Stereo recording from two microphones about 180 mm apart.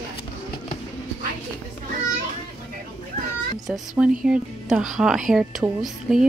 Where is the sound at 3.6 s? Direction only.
Centre (ahead or behind).